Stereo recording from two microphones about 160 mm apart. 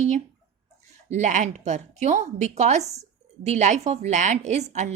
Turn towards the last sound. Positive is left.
turn(degrees=-45)  # may be behind; listen again after turning